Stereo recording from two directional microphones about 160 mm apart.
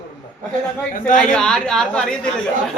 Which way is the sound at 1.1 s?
5° left (ahead or behind).